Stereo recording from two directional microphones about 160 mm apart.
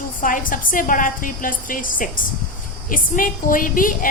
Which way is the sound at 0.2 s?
55° left (ahead or behind).